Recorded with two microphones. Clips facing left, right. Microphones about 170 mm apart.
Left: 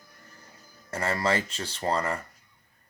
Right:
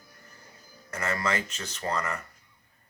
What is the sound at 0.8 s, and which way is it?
Speech, 30° left (ahead or behind).